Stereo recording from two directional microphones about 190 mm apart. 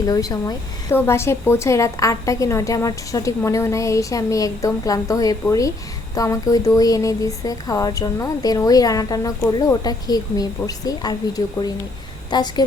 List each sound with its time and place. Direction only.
0.0 s a woman's voice: 20° left (ahead or behind)